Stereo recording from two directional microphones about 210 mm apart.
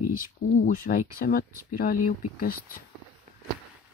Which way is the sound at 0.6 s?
40° left (ahead or behind).